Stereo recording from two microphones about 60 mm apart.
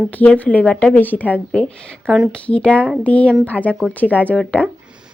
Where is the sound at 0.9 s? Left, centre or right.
Left.